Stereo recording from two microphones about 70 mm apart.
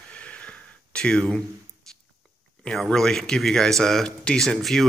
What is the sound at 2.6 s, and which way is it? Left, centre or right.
Speech, centre.